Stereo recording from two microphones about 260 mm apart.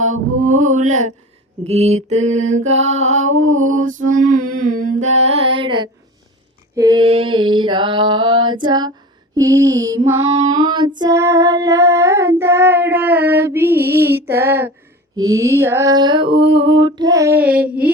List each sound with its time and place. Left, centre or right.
0.6 s music: right
1.6 s mantra: right
3.2 s music: right
3.7 s mantra: right
6.7 s child singing: centre